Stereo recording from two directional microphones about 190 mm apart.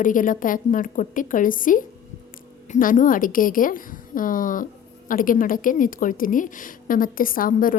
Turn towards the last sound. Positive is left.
turn(degrees=45)  # may be behind; listen again after turning